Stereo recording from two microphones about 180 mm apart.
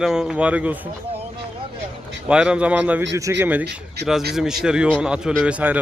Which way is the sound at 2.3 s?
5° right (ahead or behind).